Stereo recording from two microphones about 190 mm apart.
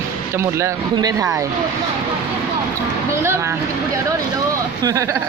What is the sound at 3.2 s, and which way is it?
Speech, 15° right (ahead or behind).